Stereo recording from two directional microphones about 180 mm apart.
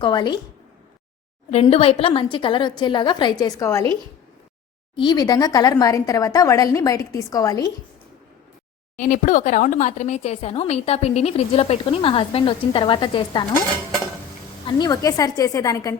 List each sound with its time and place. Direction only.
0.0 s a woman's voice: 25° left (ahead or behind)
1.6 s a woman's voice: 35° left (ahead or behind); by 3.8 s 15° left (ahead or behind)
4.9 s a woman's voice: 25° left (ahead or behind)
9.0 s speech: 45° left (ahead or behind); by 13.4 s 25° left (ahead or behind)
14.7 s a woman's voice: 20° left (ahead or behind)